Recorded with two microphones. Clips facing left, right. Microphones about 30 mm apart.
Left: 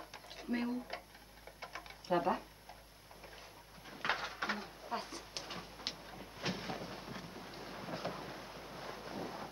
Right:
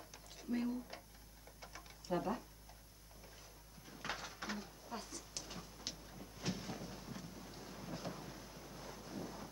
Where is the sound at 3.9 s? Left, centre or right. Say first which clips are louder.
Left 8 dB; left.